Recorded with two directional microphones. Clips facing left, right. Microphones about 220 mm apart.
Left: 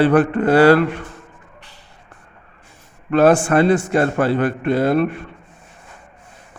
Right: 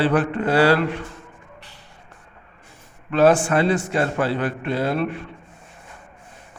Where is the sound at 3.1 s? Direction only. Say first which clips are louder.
Left 3 dB; 50° left (ahead or behind).